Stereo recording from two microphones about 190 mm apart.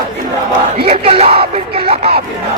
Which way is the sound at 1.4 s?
30° right (ahead or behind).